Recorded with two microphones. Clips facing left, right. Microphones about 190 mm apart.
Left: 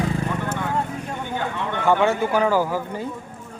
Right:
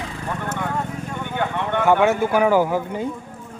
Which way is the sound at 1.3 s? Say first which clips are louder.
Right 4 dB; 60° right (ahead or behind).